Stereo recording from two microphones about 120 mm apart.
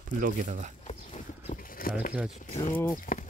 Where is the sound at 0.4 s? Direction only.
90° right.